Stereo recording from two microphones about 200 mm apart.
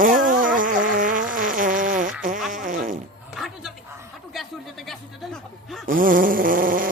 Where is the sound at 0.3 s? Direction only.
45° right (ahead or behind).